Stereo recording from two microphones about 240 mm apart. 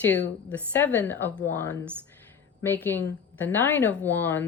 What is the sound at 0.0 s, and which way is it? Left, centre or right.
A woman's voice, centre.